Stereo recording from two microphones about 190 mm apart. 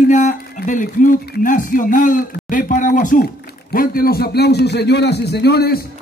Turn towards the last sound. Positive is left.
turn(degrees=55)  # may be behind; listen again after turning